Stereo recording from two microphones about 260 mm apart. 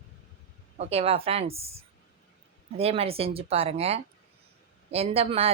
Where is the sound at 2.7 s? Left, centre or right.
Right.